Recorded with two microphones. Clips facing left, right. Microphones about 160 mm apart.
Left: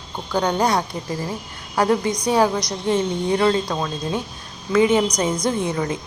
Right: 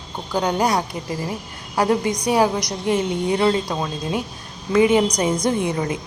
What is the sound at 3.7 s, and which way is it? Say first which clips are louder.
A woman's voice: even; 10° right (ahead or behind).